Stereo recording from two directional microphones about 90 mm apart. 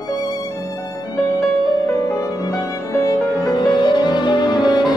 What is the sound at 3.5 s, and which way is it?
Music, 55° left (ahead or behind).